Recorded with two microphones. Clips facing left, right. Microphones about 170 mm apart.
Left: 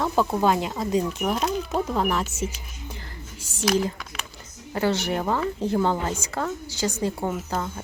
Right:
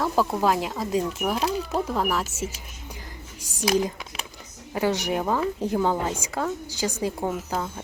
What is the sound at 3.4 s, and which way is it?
Speech, 15° right (ahead or behind).